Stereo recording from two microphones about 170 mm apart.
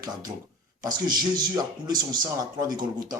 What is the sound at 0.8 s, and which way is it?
Speech, 25° right (ahead or behind).